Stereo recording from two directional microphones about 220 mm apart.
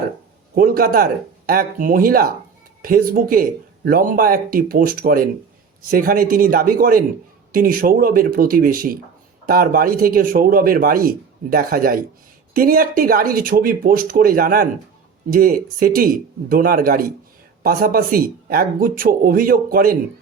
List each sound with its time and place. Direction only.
0.5 s speech: 40° right (ahead or behind)